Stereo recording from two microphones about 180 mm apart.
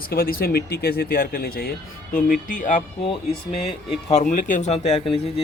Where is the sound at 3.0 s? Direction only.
30° left (ahead or behind).